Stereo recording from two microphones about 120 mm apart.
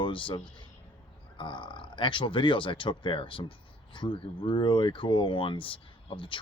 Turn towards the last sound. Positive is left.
turn(degrees=45)  # may be behind; listen again after turning